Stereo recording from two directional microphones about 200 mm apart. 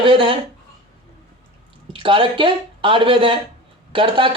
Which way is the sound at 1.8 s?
25° right (ahead or behind).